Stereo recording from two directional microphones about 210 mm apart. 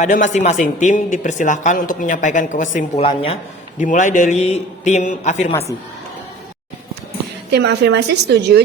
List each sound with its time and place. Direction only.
0.0 s speech: 35° left (ahead or behind)
7.5 s a woman's voice: 55° right (ahead or behind)